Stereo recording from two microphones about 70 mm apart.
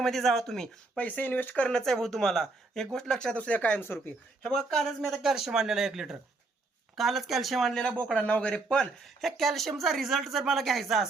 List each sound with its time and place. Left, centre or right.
0.0 s speech: centre
0.9 s speech: left
1.7 s speech: centre
3.3 s speech: centre
3.8 s speech: left
4.4 s speech: centre
5.0 s speech: centre
8.7 s speech: centre